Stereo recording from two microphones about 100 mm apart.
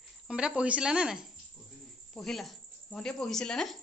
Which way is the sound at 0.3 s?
10° right (ahead or behind).